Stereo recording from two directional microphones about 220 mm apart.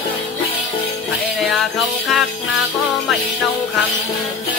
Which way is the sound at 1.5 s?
Centre (ahead or behind).